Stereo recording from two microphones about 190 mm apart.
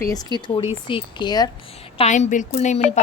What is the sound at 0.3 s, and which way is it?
A woman's voice, 25° left (ahead or behind).